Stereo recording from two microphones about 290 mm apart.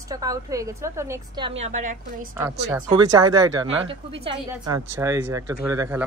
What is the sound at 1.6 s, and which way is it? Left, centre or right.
Speech, right.